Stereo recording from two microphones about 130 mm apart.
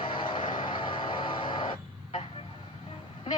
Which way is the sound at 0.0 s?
40° left (ahead or behind).